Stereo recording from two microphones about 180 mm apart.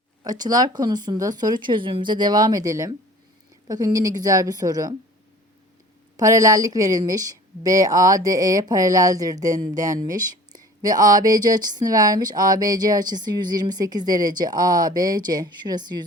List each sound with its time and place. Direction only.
0.3 s a woman's voice: 20° right (ahead or behind)
6.1 s a woman's voice: 20° right (ahead or behind)